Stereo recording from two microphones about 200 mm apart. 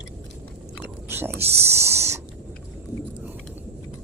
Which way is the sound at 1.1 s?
10° right (ahead or behind).